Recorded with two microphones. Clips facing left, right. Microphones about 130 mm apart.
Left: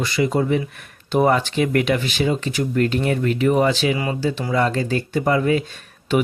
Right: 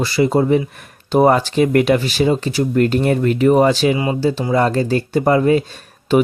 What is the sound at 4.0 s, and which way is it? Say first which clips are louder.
Speech: right 5 dB; 25° right (ahead or behind).